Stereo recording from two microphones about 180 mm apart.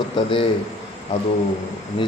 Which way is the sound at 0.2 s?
25° left (ahead or behind).